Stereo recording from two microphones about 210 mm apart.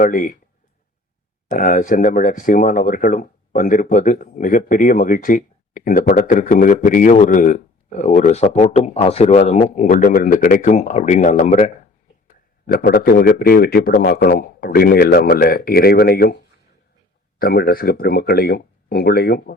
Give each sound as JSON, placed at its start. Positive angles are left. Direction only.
{"t": 0.0, "sound": "a man's voice", "side_deg": 40}
{"t": 1.5, "sound": "speech", "side_deg": 40}
{"t": 12.6, "sound": "a man's voice", "side_deg": 45}
{"t": 17.4, "sound": "a man's voice", "side_deg": 45}